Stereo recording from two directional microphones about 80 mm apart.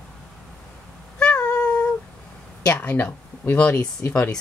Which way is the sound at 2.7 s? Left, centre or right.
Left.